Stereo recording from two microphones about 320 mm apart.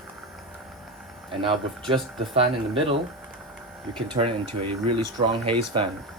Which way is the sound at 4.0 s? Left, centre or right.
Centre.